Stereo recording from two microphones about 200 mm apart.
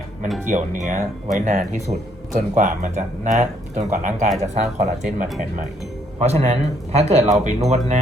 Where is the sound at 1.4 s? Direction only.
40° right (ahead or behind).